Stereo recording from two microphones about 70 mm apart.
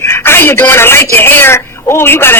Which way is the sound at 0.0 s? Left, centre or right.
Left.